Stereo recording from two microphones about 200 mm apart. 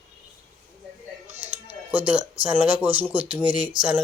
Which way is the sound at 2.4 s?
5° right (ahead or behind).